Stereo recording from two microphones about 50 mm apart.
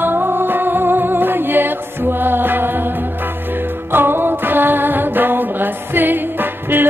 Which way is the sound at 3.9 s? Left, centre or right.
Right.